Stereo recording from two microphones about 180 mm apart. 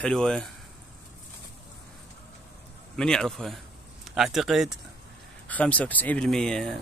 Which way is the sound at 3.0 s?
5° left (ahead or behind).